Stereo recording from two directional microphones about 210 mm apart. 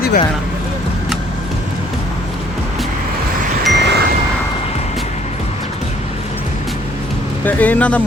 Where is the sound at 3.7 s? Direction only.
55° right (ahead or behind).